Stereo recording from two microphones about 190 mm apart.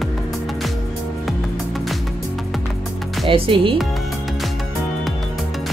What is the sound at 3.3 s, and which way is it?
Speech, 30° right (ahead or behind).